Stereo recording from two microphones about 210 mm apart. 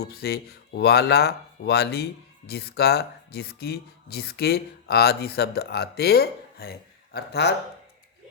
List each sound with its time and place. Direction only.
0.0 s speech: 50° left (ahead or behind)